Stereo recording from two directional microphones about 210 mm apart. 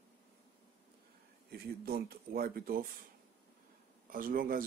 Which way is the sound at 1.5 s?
45° right (ahead or behind).